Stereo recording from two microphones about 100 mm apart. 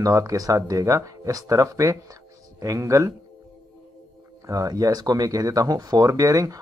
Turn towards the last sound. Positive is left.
turn(degrees=-35)  # may be behind; listen again after turning